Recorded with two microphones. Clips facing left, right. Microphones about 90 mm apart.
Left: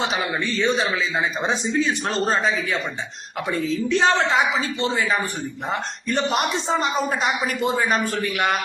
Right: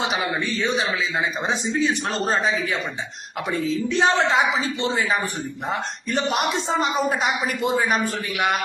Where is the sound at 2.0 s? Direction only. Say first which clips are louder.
Left 1 dB; 10° right (ahead or behind).